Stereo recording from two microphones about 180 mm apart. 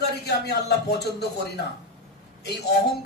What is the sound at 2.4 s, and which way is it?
Speech, 65° left (ahead or behind).